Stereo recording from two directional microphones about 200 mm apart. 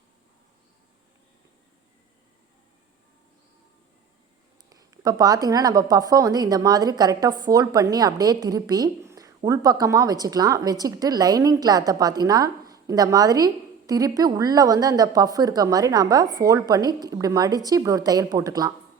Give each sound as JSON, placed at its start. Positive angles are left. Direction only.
{"t": 4.7, "sound": "a woman's voice", "side_deg": -20}